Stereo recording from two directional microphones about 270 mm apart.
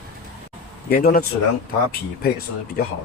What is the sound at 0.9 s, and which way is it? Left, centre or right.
Speech, left.